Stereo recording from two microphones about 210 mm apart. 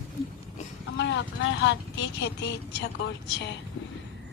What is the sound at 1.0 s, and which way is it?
Speech, 60° left (ahead or behind).